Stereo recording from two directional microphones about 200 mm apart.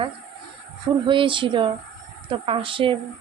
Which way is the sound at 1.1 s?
25° right (ahead or behind).